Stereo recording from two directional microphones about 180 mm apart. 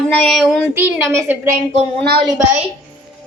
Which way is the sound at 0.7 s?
15° right (ahead or behind).